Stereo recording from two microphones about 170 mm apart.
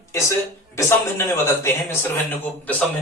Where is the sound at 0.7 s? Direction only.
15° left (ahead or behind).